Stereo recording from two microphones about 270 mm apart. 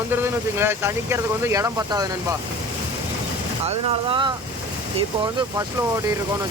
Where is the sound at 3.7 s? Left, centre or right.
Centre.